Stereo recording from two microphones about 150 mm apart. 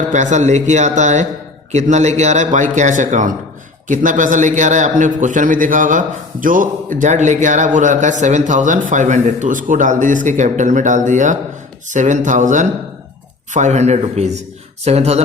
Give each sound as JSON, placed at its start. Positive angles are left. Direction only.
{"t": 0.1, "sound": "a man's voice", "side_deg": -55}